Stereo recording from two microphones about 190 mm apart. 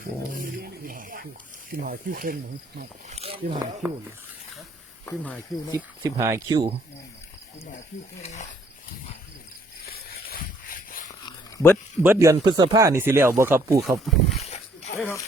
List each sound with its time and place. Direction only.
0.0 s speech: 50° right (ahead or behind)
3.1 s speech: 30° right (ahead or behind)
5.0 s speech: 5° left (ahead or behind)
5.7 s speech: 15° right (ahead or behind)
8.2 s speech: 35° left (ahead or behind)
9.8 s a sound: 50° left (ahead or behind)
11.3 s dog: 15° left (ahead or behind)
12.0 s speech: 15° right (ahead or behind)
12.4 s speech: 25° right (ahead or behind)
14.4 s a sound: 35° left (ahead or behind)
14.9 s speech: 15° left (ahead or behind)